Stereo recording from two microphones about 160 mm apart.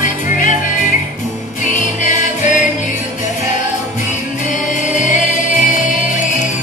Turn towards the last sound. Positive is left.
turn(degrees=50)  # may be behind; listen again after turning